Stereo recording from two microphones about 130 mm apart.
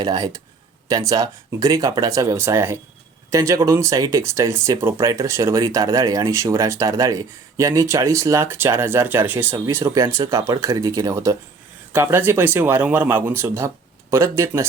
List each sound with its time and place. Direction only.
0.0 s speech: 30° right (ahead or behind)